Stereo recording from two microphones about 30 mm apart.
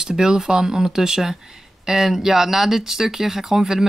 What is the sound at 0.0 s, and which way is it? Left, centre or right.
Speech, centre.